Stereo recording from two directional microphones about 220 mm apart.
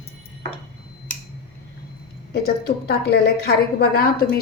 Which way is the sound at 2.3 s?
45° left (ahead or behind).